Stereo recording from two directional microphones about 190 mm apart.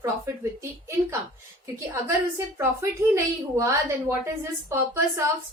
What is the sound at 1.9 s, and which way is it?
A woman's voice, 15° right (ahead or behind).